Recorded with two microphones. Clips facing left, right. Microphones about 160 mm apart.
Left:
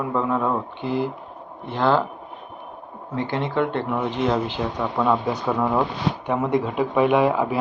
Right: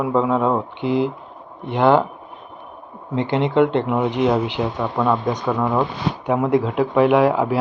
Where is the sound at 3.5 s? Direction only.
20° right (ahead or behind).